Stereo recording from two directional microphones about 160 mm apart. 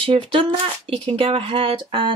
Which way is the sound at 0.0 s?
35° right (ahead or behind).